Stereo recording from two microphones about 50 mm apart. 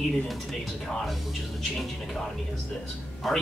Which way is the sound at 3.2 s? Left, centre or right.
Centre.